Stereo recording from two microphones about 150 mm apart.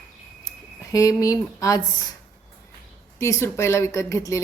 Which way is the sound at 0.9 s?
25° left (ahead or behind).